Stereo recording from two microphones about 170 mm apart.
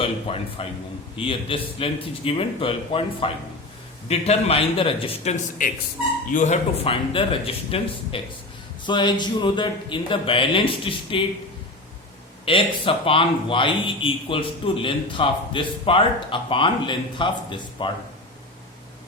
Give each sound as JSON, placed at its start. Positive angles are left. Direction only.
{"t": 0.0, "sound": "a man's voice", "side_deg": 35}
{"t": 12.5, "sound": "a man's voice", "side_deg": 30}